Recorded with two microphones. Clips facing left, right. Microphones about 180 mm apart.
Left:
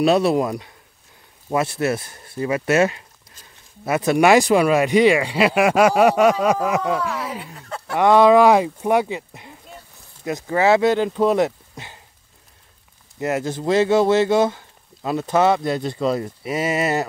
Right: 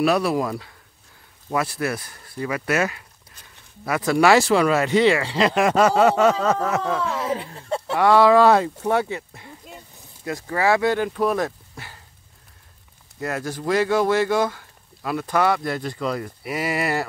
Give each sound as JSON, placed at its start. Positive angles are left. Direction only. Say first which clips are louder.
{"t": 0.0, "sound": "speech", "louder": "left 3 dB", "side_deg": 25}
{"t": 7.0, "sound": "speech", "louder": "right 2 dB", "side_deg": -25}
{"t": 8.0, "sound": "speech", "louder": "left 2 dB", "side_deg": 20}
{"t": 13.2, "sound": "speech", "louder": "left 4 dB", "side_deg": 20}